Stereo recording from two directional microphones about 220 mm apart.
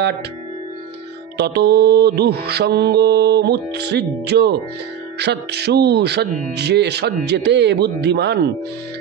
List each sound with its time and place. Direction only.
1.4 s mantra: 50° right (ahead or behind)